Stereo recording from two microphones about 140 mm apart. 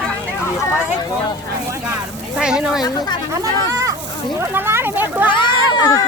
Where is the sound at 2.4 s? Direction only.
5° right (ahead or behind).